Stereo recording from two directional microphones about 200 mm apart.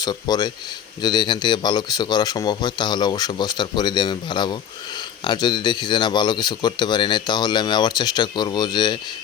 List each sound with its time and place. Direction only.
0.0 s speech: 20° left (ahead or behind)